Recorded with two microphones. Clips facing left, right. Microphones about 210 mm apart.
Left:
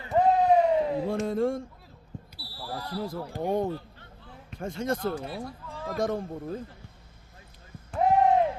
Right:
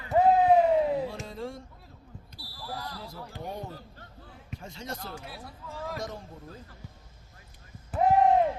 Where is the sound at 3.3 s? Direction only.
50° left (ahead or behind).